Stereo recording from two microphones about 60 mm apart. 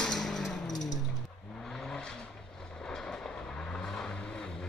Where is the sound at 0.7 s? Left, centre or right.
Left.